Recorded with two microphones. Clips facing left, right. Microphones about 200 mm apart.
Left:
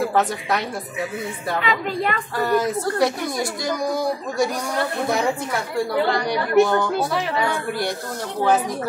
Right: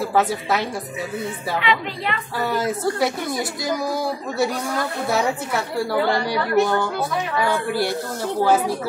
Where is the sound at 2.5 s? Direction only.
5° right (ahead or behind).